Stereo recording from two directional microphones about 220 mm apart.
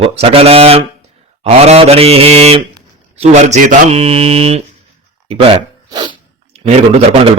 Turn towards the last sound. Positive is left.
turn(degrees=-30)  # may be behind; listen again after turning